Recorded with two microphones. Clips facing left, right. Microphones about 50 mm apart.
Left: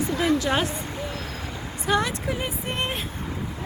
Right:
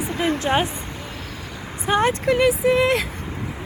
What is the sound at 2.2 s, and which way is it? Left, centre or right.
Speech, right.